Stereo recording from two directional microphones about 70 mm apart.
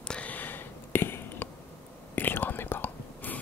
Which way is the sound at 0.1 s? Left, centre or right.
Left.